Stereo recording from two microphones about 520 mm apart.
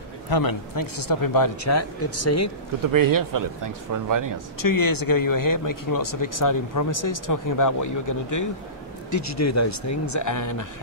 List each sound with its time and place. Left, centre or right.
0.3 s speech: left
2.9 s a man's voice: right
4.6 s speech: left